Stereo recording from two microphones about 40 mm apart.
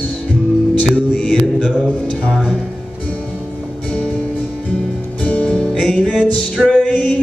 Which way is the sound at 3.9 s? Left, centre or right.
Left.